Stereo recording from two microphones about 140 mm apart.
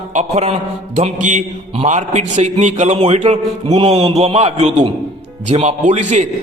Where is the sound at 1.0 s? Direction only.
60° right (ahead or behind).